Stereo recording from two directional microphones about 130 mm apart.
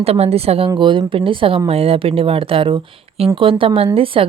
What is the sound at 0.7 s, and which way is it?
Speech, 40° right (ahead or behind).